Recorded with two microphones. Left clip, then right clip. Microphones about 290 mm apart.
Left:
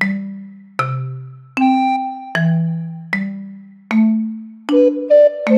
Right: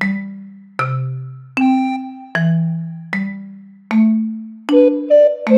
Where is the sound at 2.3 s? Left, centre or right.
Centre.